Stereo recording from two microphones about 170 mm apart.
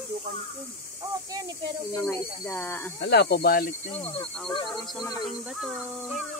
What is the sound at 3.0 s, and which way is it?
Speech, 80° left.